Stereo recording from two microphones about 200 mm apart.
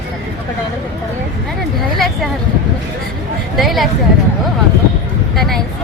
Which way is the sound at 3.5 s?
Centre (ahead or behind).